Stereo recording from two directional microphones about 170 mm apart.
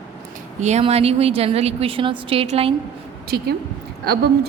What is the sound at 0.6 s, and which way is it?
A woman's voice, 40° right (ahead or behind).